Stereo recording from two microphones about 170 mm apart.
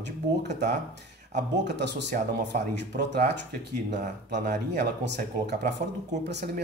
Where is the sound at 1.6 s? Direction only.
90° right.